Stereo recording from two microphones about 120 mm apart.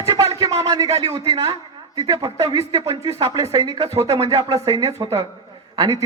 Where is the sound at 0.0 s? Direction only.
50° right (ahead or behind).